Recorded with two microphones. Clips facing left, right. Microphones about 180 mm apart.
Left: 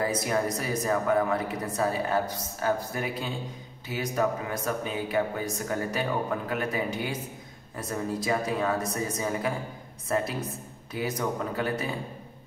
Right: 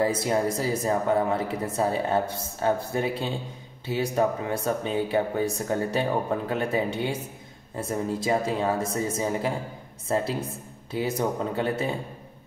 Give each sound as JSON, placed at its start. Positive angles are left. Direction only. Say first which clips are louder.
{"t": 0.0, "sound": "speech", "louder": "right 3 dB", "side_deg": -25}